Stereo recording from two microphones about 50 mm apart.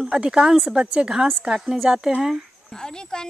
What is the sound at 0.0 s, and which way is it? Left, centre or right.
Speech, centre.